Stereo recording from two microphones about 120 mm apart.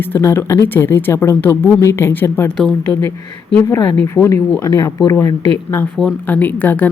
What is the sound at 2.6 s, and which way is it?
Speech, 5° left (ahead or behind).